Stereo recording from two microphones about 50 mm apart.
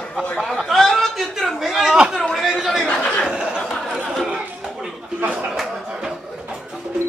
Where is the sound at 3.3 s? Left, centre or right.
Centre.